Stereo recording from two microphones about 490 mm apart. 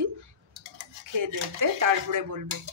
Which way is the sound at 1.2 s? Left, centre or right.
Right.